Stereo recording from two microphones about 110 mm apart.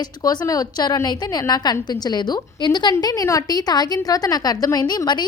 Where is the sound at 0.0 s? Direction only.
40° left (ahead or behind).